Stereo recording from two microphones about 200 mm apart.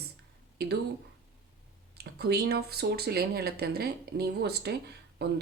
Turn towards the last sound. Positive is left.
turn(degrees=-55)  # may be behind; listen again after turning